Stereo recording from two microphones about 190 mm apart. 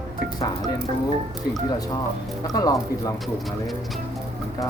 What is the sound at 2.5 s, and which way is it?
Speech, 20° left (ahead or behind).